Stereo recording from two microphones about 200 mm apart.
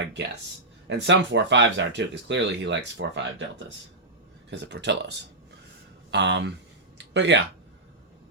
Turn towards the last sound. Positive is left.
turn(degrees=-65)  # may be behind; listen again after turning